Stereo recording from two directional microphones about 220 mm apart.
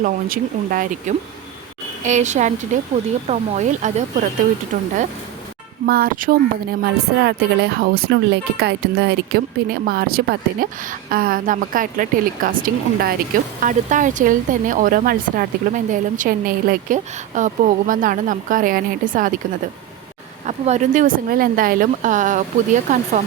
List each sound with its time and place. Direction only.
0.0 s speech: 40° right (ahead or behind)
20.5 s speech: 35° right (ahead or behind)